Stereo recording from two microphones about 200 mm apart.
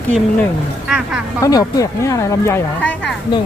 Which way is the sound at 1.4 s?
15° left (ahead or behind).